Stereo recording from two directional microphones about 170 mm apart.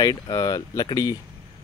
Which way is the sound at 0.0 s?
25° left (ahead or behind).